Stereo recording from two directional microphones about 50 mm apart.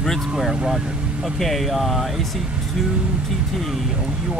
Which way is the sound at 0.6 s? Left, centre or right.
Centre.